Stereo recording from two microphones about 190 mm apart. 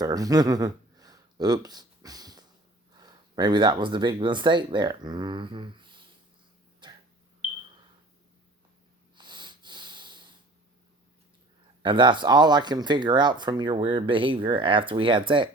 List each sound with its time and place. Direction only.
0.0 s speech: 20° right (ahead or behind)
6.8 s a sound: 25° right (ahead or behind)
9.1 s snort: 25° right (ahead or behind)
11.8 s speech: 25° right (ahead or behind)